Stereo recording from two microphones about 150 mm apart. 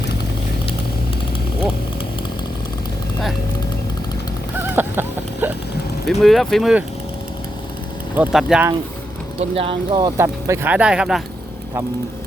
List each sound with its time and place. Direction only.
4.7 s a sound: 15° right (ahead or behind)
6.1 s speech: centre (ahead or behind)
8.1 s speech: 5° right (ahead or behind)
9.4 s speech: 40° right (ahead or behind)
10.2 s speech: 20° right (ahead or behind)